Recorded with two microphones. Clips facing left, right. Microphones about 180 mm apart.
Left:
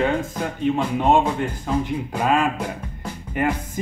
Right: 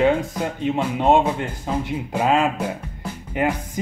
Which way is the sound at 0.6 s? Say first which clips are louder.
Left 1 dB; 15° right (ahead or behind).